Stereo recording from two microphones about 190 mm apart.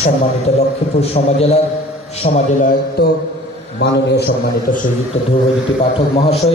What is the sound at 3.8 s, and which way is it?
A man's voice, 60° left (ahead or behind).